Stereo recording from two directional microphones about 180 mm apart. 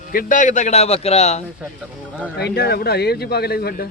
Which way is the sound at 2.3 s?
65° left (ahead or behind).